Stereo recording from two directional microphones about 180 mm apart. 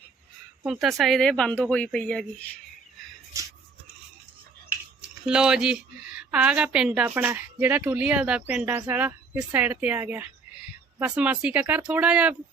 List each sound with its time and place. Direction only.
0.6 s speech: centre (ahead or behind)
3.3 s a sound: 15° right (ahead or behind)
5.2 s speech: 5° right (ahead or behind)